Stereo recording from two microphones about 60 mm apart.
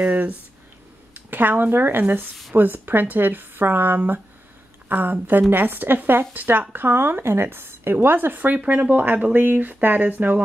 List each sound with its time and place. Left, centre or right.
0.0 s speech: right
8.4 s speech: right